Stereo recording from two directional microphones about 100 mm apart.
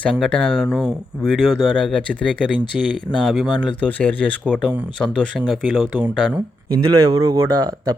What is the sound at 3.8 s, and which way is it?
Speech, 15° left (ahead or behind).